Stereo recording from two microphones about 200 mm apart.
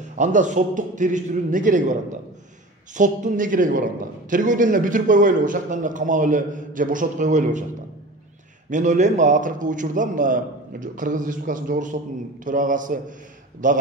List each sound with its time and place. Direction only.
0.0 s a man's voice: 40° right (ahead or behind)
8.6 s a man's voice: 40° right (ahead or behind)